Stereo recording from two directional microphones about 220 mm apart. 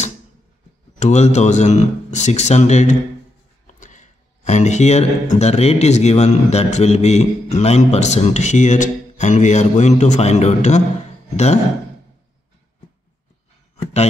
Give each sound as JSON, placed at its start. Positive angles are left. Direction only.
{"t": 0.9, "sound": "speech", "side_deg": 30}